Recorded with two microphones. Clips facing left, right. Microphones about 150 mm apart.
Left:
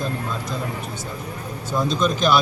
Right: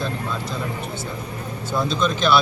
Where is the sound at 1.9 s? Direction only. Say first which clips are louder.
Left 1 dB; 40° left (ahead or behind).